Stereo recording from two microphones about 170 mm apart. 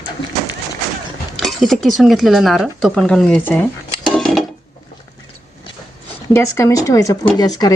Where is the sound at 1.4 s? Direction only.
Centre (ahead or behind).